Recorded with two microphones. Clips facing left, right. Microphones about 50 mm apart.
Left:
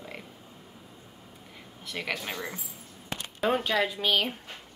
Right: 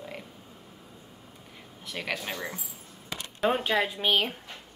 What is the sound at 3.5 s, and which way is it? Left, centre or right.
Speech, centre.